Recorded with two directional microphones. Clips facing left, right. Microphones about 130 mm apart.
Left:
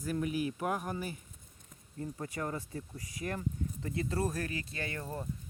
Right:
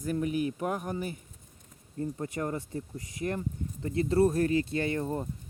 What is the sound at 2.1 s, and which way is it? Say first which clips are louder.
Speech: right 2 dB; 25° right (ahead or behind).